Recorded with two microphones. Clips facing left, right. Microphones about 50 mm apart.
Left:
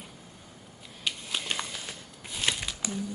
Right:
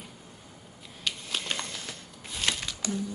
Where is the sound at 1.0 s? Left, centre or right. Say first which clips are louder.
Even; centre.